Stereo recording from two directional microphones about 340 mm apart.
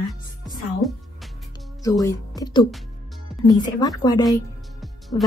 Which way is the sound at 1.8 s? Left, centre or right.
Centre.